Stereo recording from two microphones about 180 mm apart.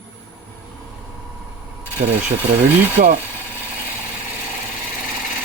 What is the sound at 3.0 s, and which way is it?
Speech, 45° right (ahead or behind).